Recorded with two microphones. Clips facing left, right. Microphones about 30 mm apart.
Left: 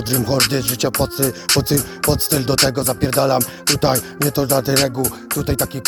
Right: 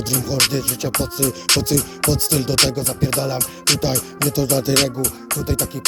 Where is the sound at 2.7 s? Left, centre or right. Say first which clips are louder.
Left 4 dB; left.